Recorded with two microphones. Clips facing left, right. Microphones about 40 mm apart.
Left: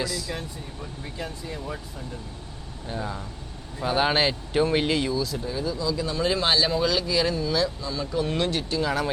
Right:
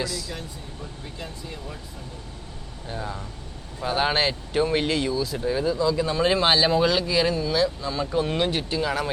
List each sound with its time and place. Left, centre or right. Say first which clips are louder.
0.0 s speech: even; centre
2.8 s speech: left 1 dB; centre
5.1 s speech: right 1 dB; centre
5.4 s speech: right 5 dB; right; by 7.7 s centre
7.8 s speech: right 2 dB; right
8.3 s speech: right 1 dB; centre